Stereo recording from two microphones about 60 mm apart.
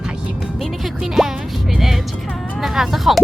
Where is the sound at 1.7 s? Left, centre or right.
Centre.